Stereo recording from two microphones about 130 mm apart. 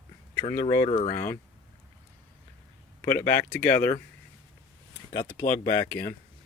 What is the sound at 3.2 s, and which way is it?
Speech, 15° left (ahead or behind).